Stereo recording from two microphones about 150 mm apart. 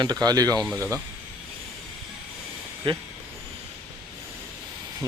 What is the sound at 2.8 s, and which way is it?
Speech, 35° right (ahead or behind).